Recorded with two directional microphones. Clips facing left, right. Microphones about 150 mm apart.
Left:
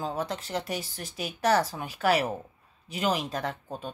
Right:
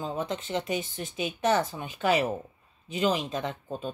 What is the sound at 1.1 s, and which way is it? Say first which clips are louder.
Speech: even; centre (ahead or behind).